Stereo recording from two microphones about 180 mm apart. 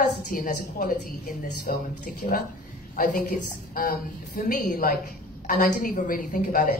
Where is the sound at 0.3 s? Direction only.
45° left (ahead or behind).